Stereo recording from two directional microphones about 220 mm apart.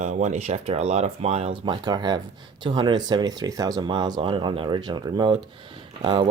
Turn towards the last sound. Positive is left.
turn(degrees=-20)  # may be behind; listen again after turning